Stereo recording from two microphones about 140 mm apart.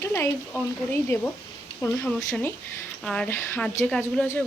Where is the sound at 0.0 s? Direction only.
20° left (ahead or behind).